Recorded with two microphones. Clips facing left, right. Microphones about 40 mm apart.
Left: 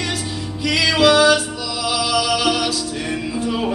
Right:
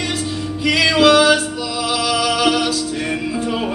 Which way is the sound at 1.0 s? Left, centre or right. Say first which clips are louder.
Even; right.